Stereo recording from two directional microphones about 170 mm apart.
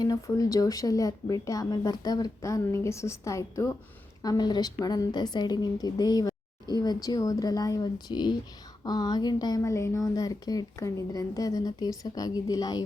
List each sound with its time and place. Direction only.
0.0 s speech: 20° left (ahead or behind)